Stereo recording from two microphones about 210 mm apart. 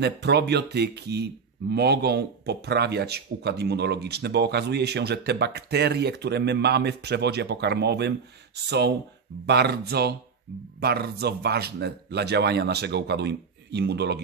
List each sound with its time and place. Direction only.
0.0 s speech: 55° right (ahead or behind)